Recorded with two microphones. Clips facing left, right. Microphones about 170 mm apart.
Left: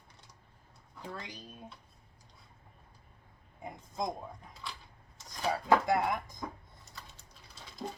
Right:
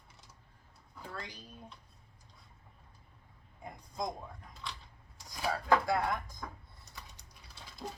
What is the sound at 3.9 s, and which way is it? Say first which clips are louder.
Speech: left 2 dB; 20° left (ahead or behind).